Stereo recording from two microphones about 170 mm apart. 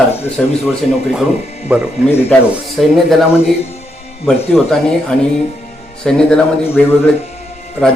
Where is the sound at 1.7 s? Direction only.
5° right (ahead or behind).